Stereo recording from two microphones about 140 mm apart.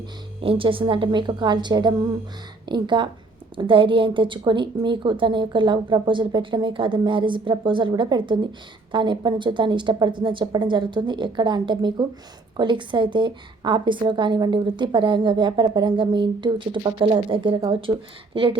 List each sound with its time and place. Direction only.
0.4 s a woman's voice: 40° right (ahead or behind)